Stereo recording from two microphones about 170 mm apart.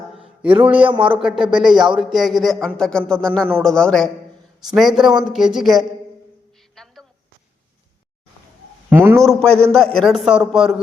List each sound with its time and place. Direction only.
0.4 s speech: 10° right (ahead or behind)
0.8 s speech: 30° right (ahead or behind)
1.2 s speech: 5° right (ahead or behind)
6.8 s a sound: centre (ahead or behind)
8.9 s speech: 15° right (ahead or behind)
9.2 s speech: 5° left (ahead or behind)